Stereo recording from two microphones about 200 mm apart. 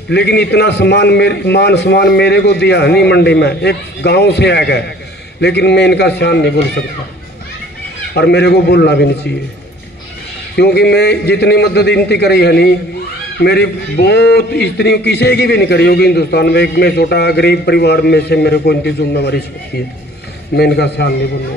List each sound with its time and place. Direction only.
0.1 s a man's voice: 55° left (ahead or behind)
8.1 s a man's voice: 55° left (ahead or behind)
10.5 s a man's voice: 55° left (ahead or behind)
20.5 s a man's voice: 55° left (ahead or behind)